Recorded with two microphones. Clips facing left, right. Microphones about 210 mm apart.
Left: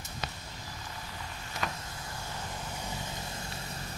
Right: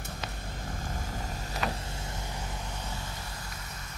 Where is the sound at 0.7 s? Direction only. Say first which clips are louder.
Right 8 dB; 50° right (ahead or behind).